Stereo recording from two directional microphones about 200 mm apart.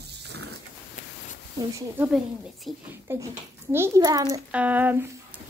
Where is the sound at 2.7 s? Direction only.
Centre (ahead or behind).